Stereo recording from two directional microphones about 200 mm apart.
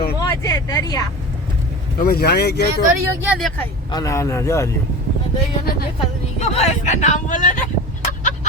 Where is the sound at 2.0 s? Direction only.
50° left (ahead or behind).